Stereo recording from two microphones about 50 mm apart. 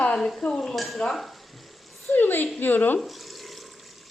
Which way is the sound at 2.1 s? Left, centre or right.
Left.